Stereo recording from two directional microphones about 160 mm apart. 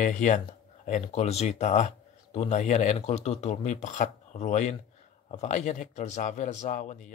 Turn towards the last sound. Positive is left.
turn(degrees=50)  # may be behind; listen again after turning